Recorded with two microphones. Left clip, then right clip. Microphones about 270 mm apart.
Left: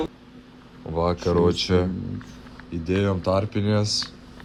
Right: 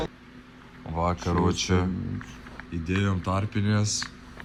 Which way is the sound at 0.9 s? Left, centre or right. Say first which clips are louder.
Left 5 dB; left.